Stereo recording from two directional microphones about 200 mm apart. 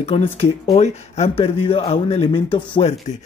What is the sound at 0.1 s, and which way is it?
Speech, 25° left (ahead or behind).